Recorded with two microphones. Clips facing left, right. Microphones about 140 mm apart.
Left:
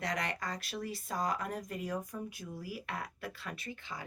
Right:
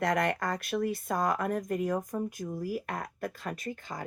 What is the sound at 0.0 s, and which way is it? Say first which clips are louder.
Speech: right 9 dB; 55° right (ahead or behind).